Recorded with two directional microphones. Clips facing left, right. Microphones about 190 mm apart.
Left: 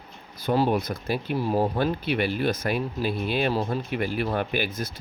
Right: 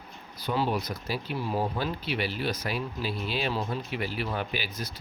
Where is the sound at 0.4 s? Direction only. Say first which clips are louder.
Left 6 dB; 45° left (ahead or behind).